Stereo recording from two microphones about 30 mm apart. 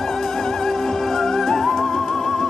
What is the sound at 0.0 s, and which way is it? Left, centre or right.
Music, centre.